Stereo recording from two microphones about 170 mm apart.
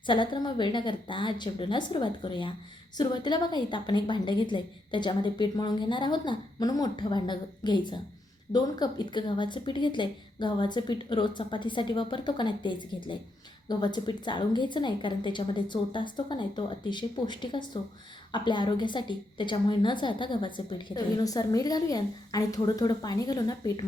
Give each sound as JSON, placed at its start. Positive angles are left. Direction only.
{"t": 0.0, "sound": "a woman's voice", "side_deg": 30}